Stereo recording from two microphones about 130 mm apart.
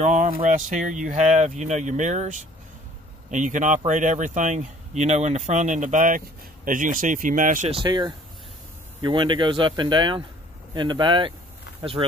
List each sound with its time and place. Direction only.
0.0 s speech: 75° right (ahead or behind); by 7.6 s 90° right
7.8 s speech: 30° right (ahead or behind)